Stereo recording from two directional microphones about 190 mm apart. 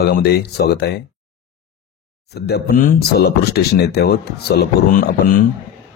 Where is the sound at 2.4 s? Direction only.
60° left (ahead or behind).